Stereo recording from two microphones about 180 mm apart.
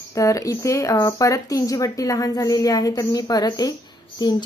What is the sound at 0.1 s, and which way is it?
Speech, 15° left (ahead or behind).